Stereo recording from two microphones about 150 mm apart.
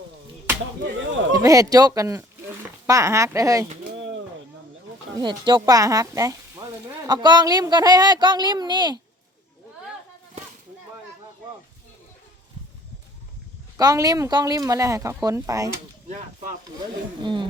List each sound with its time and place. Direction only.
1.3 s speech: 20° right (ahead or behind)
5.2 s speech: 30° right (ahead or behind)
13.7 s speech: 25° right (ahead or behind)
17.2 s speech: 35° right (ahead or behind)